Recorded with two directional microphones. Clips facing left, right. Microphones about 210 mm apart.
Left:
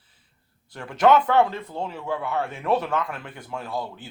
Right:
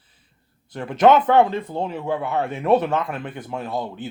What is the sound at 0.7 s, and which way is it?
Speech, 20° right (ahead or behind).